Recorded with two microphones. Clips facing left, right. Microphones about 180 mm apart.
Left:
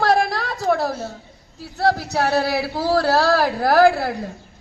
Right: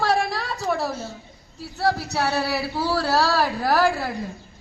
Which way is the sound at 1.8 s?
50° left (ahead or behind).